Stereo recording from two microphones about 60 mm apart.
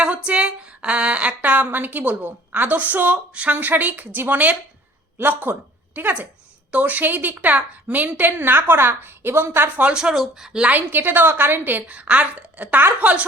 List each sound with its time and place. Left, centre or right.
0.0 s a woman's voice: centre
9.9 s speech: centre
10.7 s a woman's voice: right
11.9 s speech: right